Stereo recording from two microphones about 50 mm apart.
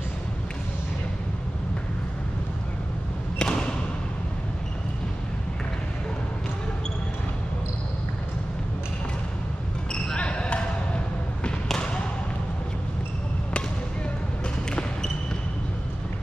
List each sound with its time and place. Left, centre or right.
3.3 s thump: centre
9.9 s basketball bounce: left
14.7 s basketball bounce: centre